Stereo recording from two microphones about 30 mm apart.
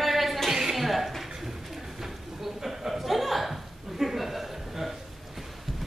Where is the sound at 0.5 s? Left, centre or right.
Centre.